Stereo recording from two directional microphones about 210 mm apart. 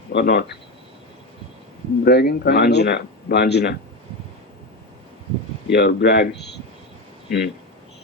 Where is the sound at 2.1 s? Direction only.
50° left (ahead or behind).